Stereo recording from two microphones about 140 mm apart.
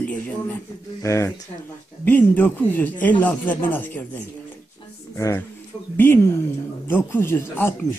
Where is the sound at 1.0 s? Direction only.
20° left (ahead or behind).